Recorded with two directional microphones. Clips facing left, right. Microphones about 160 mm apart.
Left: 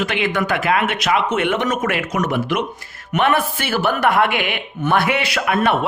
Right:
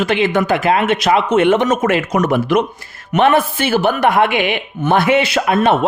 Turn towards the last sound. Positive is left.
turn(degrees=-25)  # may be behind; listen again after turning